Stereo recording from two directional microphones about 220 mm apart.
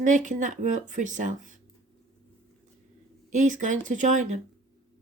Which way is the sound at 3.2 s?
35° right (ahead or behind).